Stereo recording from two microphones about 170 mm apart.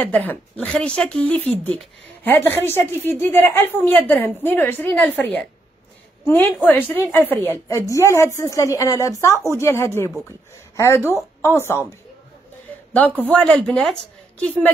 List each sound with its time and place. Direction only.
0.0 s a woman's voice: 10° left (ahead or behind)
13.3 s a woman's voice: 5° left (ahead or behind)